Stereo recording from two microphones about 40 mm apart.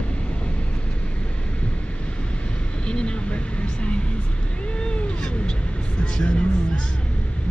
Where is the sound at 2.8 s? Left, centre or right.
Left.